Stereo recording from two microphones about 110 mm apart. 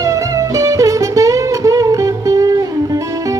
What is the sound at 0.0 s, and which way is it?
Music, 30° right (ahead or behind).